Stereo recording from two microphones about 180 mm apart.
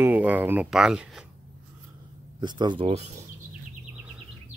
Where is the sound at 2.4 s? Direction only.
25° right (ahead or behind).